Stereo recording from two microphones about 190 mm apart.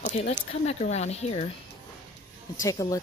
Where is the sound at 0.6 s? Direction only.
35° left (ahead or behind).